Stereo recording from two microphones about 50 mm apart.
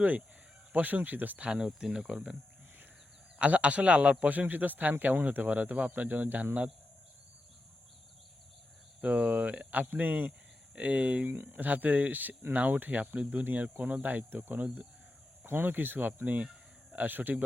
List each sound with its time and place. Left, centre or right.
0.7 s a man's voice: right
1.5 s speech: centre
3.3 s a man's voice: right
9.0 s a man's voice: right